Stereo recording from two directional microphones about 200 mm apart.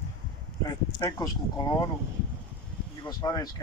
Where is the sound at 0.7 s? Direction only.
20° left (ahead or behind).